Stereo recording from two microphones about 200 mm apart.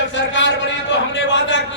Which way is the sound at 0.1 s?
65° left (ahead or behind).